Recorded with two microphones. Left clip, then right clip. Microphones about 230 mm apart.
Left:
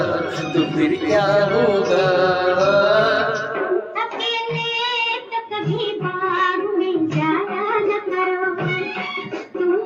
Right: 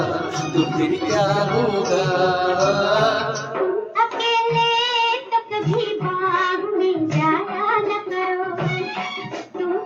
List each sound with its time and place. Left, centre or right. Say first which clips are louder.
0.0 s music: left 2 dB; centre
3.9 s music: right 4 dB; right
6.8 s child singing: right 1 dB; right